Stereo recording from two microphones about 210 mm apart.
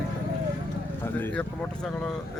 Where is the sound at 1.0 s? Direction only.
10° left (ahead or behind).